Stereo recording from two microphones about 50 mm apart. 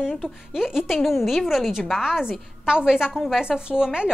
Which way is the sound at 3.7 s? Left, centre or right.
Centre.